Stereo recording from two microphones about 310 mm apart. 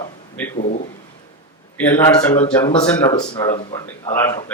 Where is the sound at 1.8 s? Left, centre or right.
Centre.